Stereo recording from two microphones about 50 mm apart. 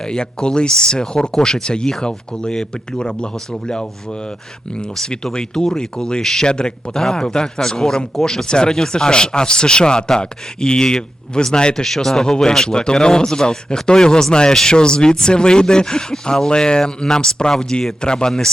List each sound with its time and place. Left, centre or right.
0.0 s speech: centre
4.9 s speech: centre